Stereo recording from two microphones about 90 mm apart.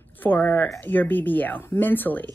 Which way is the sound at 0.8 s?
20° left (ahead or behind).